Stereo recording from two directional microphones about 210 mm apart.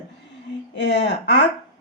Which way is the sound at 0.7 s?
55° left (ahead or behind).